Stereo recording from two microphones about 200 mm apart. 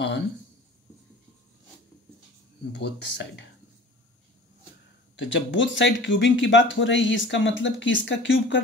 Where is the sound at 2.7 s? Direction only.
60° left (ahead or behind).